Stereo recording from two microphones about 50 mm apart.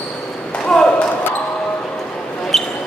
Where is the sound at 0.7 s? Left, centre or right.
Centre.